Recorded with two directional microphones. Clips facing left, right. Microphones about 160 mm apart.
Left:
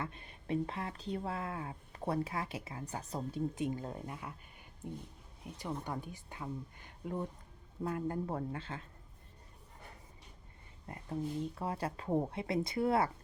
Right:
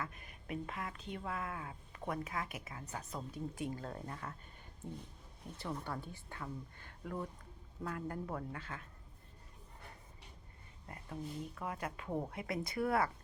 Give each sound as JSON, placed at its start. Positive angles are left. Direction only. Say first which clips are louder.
{"t": 0.0, "sound": "speech", "louder": "left 3 dB", "side_deg": 30}
{"t": 5.5, "sound": "speech", "louder": "left 2 dB", "side_deg": 15}
{"t": 10.8, "sound": "speech", "louder": "left 6 dB", "side_deg": 30}